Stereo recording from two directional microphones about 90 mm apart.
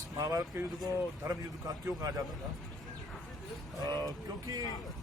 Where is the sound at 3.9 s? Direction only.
45° right (ahead or behind).